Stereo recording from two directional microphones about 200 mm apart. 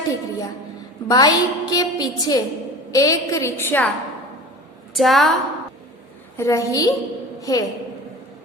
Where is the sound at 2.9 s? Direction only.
15° left (ahead or behind).